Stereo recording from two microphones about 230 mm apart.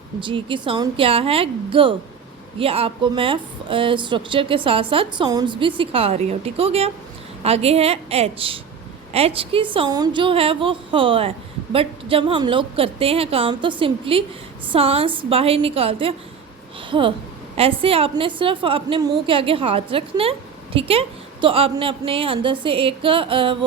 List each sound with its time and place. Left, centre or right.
0.2 s a woman's voice: right